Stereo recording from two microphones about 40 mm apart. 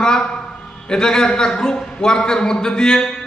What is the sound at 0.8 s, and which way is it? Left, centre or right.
A man's voice, centre.